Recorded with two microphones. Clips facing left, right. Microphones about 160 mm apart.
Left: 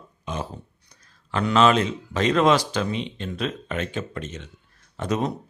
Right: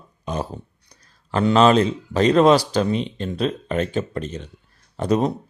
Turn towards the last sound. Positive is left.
turn(degrees=-35)  # may be behind; listen again after turning